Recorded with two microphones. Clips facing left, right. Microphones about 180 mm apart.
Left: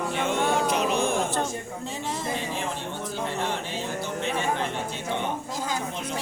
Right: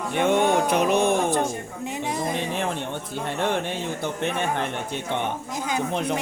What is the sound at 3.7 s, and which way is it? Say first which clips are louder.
A man's voice: right 2 dB; 60° right (ahead or behind).